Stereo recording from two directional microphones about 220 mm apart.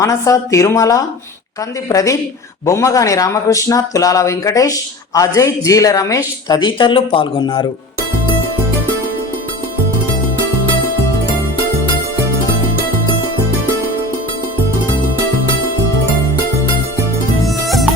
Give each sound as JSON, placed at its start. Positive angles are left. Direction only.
{"t": 0.0, "sound": "speech", "side_deg": 15}